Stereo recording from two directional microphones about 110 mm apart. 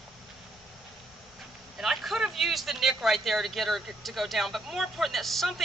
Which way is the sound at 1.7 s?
Centre (ahead or behind).